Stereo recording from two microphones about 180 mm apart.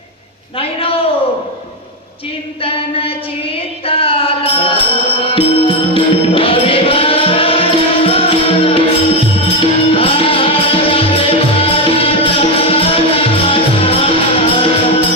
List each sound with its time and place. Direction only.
3.8 s music: 30° left (ahead or behind)